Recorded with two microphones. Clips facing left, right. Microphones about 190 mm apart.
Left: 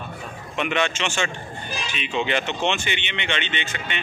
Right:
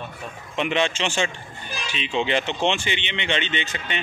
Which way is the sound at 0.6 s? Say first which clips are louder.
Right 1 dB; 30° right (ahead or behind).